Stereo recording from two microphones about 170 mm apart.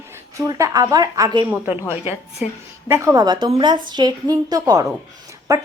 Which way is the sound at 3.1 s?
25° right (ahead or behind).